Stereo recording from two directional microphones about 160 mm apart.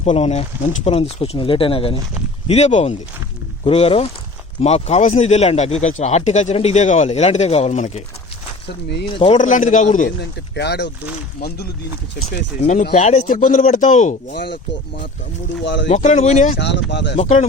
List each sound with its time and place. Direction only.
0.0 s speech: 40° left (ahead or behind)
9.0 s speech: 35° left (ahead or behind)
9.4 s speech: 50° left (ahead or behind)
10.2 s speech: 90° left
12.5 s speech: 45° left (ahead or behind)
15.6 s speech: 90° left
15.9 s speech: 50° left (ahead or behind)
16.9 s speech: 90° left
17.2 s speech: 50° left (ahead or behind)